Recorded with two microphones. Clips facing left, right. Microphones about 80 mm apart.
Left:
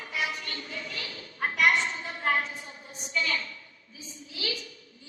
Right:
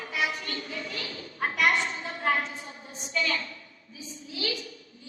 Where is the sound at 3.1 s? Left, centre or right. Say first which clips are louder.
Right 1 dB; right.